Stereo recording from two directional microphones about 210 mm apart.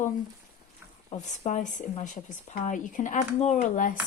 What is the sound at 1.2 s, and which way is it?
Speech, 35° left (ahead or behind).